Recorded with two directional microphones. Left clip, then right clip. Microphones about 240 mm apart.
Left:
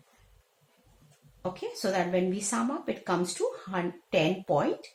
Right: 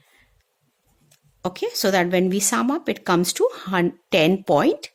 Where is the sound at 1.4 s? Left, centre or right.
Right.